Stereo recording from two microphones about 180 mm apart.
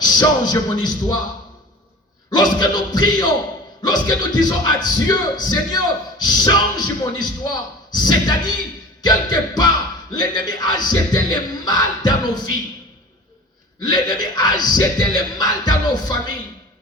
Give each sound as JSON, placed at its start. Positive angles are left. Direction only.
{"t": 0.0, "sound": "speech", "side_deg": 20}
{"t": 2.3, "sound": "speech", "side_deg": 25}
{"t": 13.8, "sound": "speech", "side_deg": 20}